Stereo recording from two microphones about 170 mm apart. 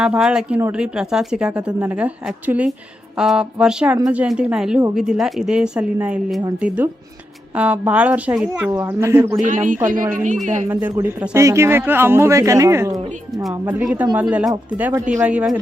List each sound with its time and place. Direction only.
0.0 s a man's voice: 5° right (ahead or behind)
9.4 s speech: 50° right (ahead or behind)
10.7 s a man's voice: 10° right (ahead or behind)